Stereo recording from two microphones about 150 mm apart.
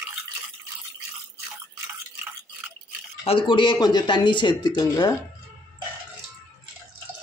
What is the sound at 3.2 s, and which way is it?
Speech, 35° left (ahead or behind).